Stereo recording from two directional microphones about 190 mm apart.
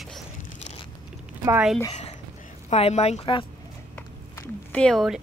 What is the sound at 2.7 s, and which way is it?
Speech, 35° left (ahead or behind).